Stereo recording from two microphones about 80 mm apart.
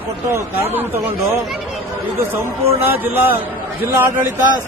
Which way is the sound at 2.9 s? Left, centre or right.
Right.